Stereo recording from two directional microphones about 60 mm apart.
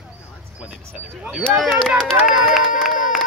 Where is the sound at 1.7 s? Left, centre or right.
Centre.